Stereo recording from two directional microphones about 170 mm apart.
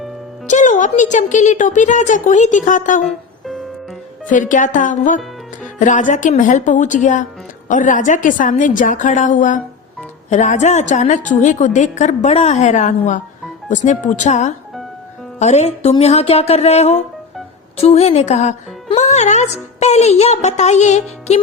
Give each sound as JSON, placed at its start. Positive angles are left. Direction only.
{"t": 0.4, "sound": "a woman's voice", "side_deg": 45}
{"t": 3.0, "sound": "music", "side_deg": 0}
{"t": 4.3, "sound": "a woman's voice", "side_deg": 50}